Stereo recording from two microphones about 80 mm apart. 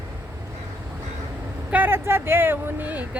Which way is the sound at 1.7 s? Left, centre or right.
Right.